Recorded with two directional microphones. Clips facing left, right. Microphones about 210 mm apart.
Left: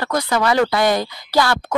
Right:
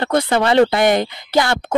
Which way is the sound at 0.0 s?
25° right (ahead or behind).